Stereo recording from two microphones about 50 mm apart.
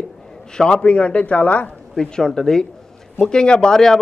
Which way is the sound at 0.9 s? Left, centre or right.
Left.